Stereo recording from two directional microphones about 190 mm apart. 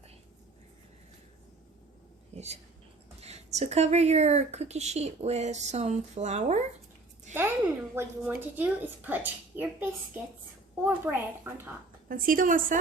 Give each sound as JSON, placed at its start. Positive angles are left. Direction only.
{"t": 2.3, "sound": "a woman's voice", "side_deg": -35}
{"t": 7.9, "sound": "a woman's voice", "side_deg": -10}
{"t": 12.0, "sound": "a woman's voice", "side_deg": -45}